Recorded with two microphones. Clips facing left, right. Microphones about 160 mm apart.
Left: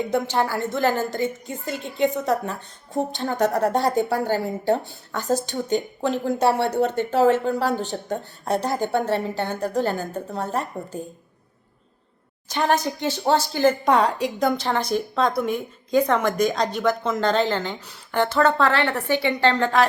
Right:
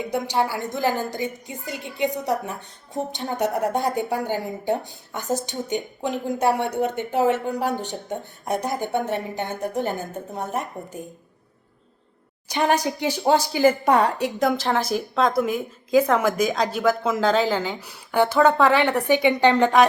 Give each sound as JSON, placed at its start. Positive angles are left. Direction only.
{"t": 0.1, "sound": "a woman's voice", "side_deg": -15}
{"t": 12.5, "sound": "a woman's voice", "side_deg": -10}